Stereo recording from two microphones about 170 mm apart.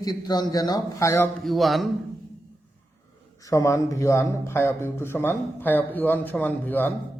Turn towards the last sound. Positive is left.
turn(degrees=10)  # may be behind; listen again after turning